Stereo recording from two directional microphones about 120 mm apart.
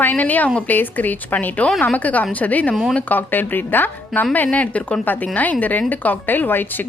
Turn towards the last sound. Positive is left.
turn(degrees=15)  # may be behind; listen again after turning